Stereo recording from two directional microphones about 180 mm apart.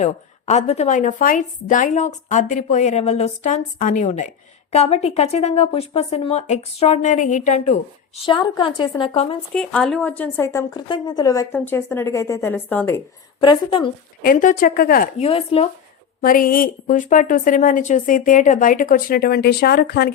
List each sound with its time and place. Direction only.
0.0 s a woman's voice: 40° left (ahead or behind)
9.6 s a woman's voice: 5° left (ahead or behind)
13.4 s a woman's voice: 25° left (ahead or behind)
14.2 s a woman's voice: 50° left (ahead or behind)
15.2 s speech: 30° left (ahead or behind)
16.2 s a woman's voice: 50° left (ahead or behind)